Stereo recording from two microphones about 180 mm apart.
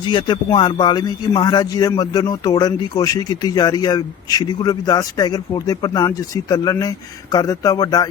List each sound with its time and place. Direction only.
0.1 s a man's voice: 25° left (ahead or behind)